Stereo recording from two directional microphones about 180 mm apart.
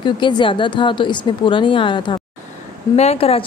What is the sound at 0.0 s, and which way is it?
A woman's voice, 25° left (ahead or behind).